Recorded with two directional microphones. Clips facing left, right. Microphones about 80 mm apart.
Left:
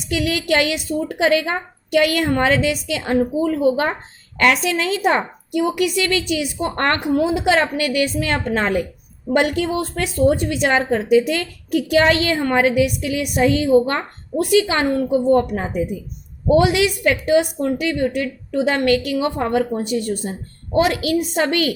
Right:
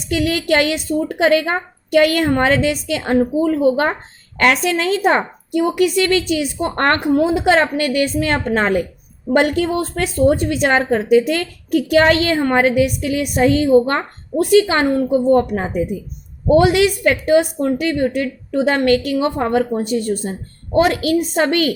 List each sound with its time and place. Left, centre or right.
0.1 s a woman's voice: right